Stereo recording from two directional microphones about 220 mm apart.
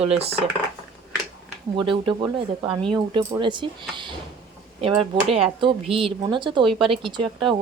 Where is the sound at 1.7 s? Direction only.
20° right (ahead or behind).